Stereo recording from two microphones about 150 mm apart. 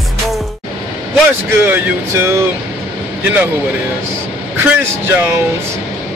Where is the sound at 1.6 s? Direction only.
15° right (ahead or behind).